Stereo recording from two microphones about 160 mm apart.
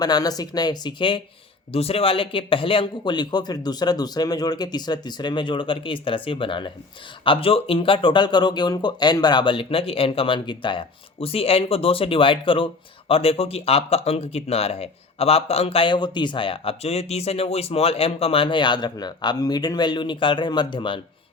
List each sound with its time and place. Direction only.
0.0 s speech: 25° left (ahead or behind)